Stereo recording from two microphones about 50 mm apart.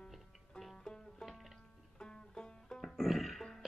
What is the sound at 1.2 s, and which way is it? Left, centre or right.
Music, centre.